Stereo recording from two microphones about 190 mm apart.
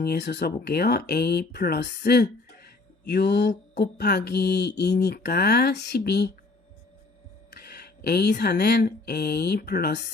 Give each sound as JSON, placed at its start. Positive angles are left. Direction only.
{"t": 0.0, "sound": "speech", "side_deg": 60}
{"t": 7.5, "sound": "speech", "side_deg": 60}